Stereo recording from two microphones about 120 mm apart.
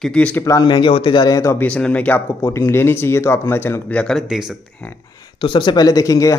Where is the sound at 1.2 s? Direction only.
30° left (ahead or behind).